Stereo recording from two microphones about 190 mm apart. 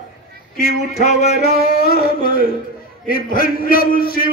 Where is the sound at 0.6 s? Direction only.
35° left (ahead or behind).